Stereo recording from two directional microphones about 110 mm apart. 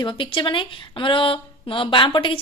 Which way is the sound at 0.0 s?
50° left (ahead or behind).